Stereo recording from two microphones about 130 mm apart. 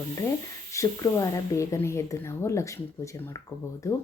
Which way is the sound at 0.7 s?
25° left (ahead or behind).